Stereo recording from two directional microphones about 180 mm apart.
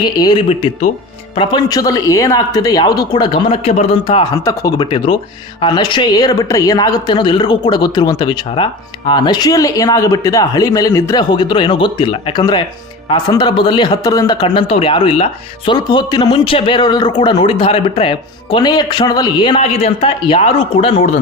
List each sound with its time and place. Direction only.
0.0 s speech: 25° left (ahead or behind)